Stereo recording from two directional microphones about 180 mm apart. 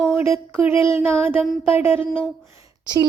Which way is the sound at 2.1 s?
Centre (ahead or behind).